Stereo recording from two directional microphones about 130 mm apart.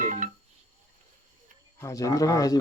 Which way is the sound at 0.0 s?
75° right (ahead or behind).